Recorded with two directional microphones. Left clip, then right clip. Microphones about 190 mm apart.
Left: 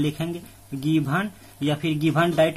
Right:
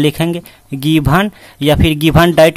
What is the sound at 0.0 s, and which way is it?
Speech, 45° right (ahead or behind).